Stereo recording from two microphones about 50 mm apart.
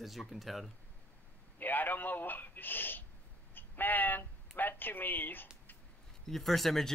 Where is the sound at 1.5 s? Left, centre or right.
Left.